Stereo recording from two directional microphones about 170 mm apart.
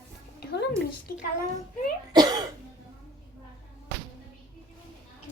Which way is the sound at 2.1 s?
25° right (ahead or behind).